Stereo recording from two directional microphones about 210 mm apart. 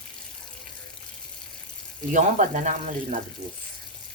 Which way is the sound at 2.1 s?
35° right (ahead or behind).